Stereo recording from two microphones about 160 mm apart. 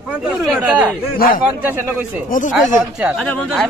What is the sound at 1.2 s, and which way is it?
Speech, 65° left (ahead or behind).